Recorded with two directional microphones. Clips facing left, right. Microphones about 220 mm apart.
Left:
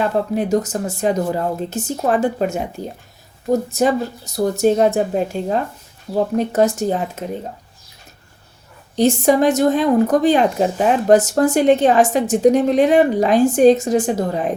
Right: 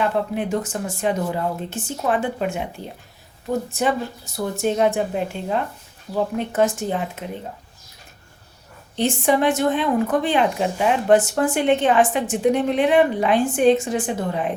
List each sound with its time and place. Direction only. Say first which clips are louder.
0.0 s speech: left 3 dB; 40° left (ahead or behind)
9.0 s speech: left 5 dB; 40° left (ahead or behind)